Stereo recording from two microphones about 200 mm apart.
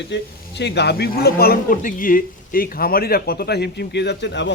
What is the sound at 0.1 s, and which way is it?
Speech, 60° left (ahead or behind).